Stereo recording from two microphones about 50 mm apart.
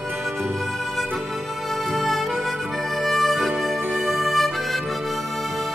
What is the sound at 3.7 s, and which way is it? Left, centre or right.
Music, right.